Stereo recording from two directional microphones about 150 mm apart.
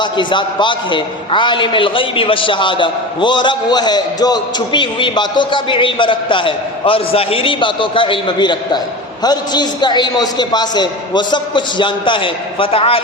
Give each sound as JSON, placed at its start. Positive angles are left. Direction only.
{"t": 0.0, "sound": "a man's voice", "side_deg": 30}